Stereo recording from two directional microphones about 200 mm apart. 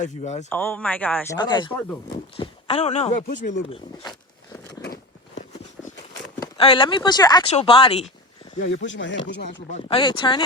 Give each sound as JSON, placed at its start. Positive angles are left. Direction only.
{"t": 0.0, "sound": "speech", "side_deg": 35}
{"t": 0.5, "sound": "speech", "side_deg": 10}
{"t": 1.4, "sound": "speech", "side_deg": 20}
{"t": 4.8, "sound": "biting", "side_deg": 60}
{"t": 6.4, "sound": "speech", "side_deg": 25}
{"t": 8.5, "sound": "speech", "side_deg": 65}
{"t": 9.7, "sound": "speech", "side_deg": 25}